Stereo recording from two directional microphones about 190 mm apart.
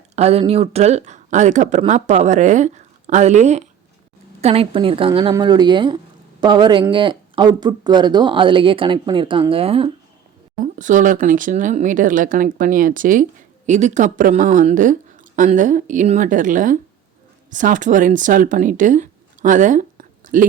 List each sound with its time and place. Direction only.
0.2 s speech: 35° right (ahead or behind)
10.8 s speech: 40° right (ahead or behind)